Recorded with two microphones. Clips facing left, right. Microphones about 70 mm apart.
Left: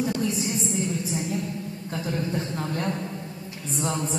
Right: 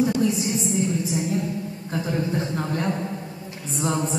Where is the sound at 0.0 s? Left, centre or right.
Centre.